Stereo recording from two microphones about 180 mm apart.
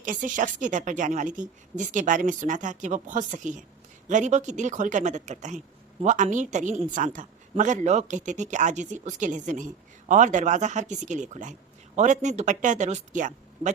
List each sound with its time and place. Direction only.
0.0 s a woman's voice: 45° right (ahead or behind)